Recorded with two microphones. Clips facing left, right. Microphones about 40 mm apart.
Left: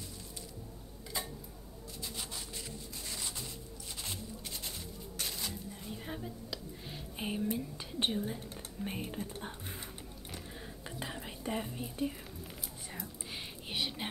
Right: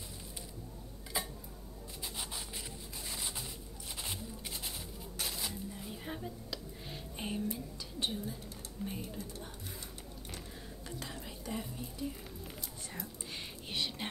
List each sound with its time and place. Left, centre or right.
1.1 s tick-tock: centre
2.0 s a sound: centre
3.1 s music: centre
7.4 s whispering: left
8.8 s speech: left
10.9 s whispering: left
12.4 s whispering: centre